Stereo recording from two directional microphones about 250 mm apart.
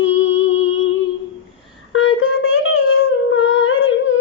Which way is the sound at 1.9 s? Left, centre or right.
Left.